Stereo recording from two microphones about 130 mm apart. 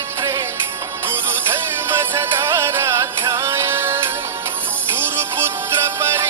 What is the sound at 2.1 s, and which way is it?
Music, 20° right (ahead or behind).